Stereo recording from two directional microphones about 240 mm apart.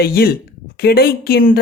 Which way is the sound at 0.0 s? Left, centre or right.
Left.